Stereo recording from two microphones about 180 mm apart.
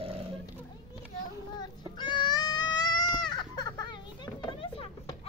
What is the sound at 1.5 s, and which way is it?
Baby cry, 25° left (ahead or behind).